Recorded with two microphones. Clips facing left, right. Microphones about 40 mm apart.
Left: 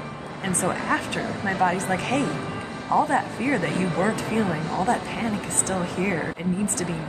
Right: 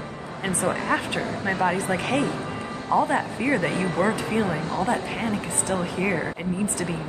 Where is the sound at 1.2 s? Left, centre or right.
Right.